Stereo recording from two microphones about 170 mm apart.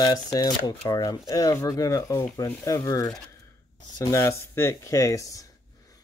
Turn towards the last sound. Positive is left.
turn(degrees=20)  # may be behind; listen again after turning